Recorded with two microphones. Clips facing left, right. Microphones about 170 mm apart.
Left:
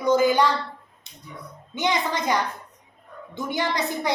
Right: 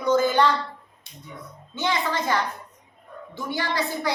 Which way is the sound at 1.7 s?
15° left (ahead or behind).